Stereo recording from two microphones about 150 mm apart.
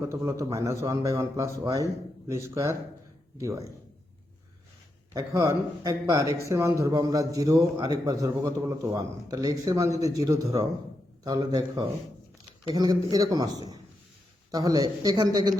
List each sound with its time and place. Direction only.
0.0 s a man's voice: 20° right (ahead or behind)
5.1 s a man's voice: 20° right (ahead or behind)